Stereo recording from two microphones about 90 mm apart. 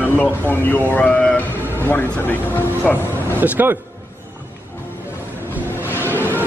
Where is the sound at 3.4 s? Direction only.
20° right (ahead or behind).